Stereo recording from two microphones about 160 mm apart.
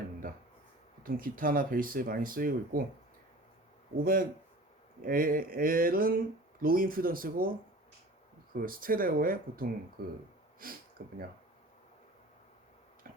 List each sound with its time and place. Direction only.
1.0 s speech: 60° right (ahead or behind)
3.9 s speech: 65° right (ahead or behind)
8.5 s speech: 65° right (ahead or behind)